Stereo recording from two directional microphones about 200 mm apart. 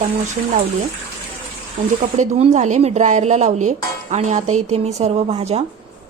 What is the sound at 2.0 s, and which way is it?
A woman's voice, 35° right (ahead or behind).